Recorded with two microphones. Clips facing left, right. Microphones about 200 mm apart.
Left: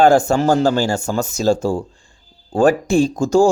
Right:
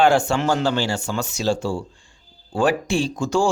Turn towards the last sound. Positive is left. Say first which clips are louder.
# left 7 dB
turn(degrees=40)  # may be behind; listen again after turning